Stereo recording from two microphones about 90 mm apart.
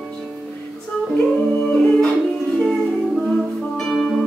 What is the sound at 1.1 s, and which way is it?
Music, 15° left (ahead or behind).